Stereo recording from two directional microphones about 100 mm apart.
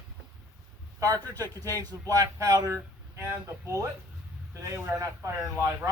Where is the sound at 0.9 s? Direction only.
35° right (ahead or behind).